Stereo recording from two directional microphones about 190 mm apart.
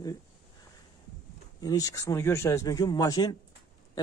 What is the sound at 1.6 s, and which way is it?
Speech, 20° left (ahead or behind).